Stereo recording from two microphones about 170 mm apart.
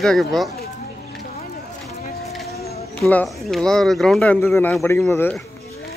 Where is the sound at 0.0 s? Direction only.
Centre (ahead or behind).